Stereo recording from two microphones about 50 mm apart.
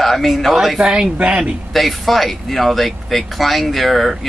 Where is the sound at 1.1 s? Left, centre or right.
Right.